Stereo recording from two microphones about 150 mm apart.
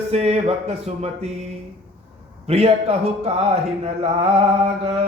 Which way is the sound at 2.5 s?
40° right (ahead or behind).